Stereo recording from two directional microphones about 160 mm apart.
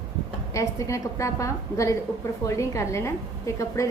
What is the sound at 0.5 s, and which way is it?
A woman's voice, 20° left (ahead or behind).